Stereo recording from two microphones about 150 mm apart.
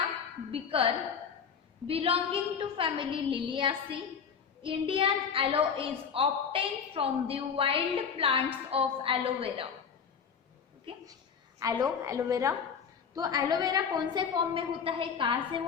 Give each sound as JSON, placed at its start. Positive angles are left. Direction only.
{"t": 0.5, "sound": "a woman's voice", "side_deg": -40}
{"t": 11.6, "sound": "a woman's voice", "side_deg": -15}